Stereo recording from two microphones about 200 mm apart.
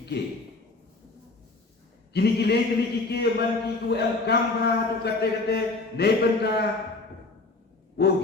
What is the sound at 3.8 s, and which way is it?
Speech, 55° left (ahead or behind).